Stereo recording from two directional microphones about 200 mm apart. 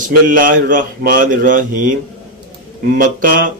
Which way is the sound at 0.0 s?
45° right (ahead or behind).